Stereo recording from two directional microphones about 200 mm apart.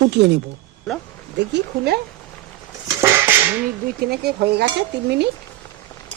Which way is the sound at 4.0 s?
50° right (ahead or behind).